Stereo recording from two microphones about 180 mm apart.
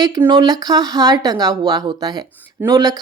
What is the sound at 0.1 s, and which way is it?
Speech, 20° right (ahead or behind).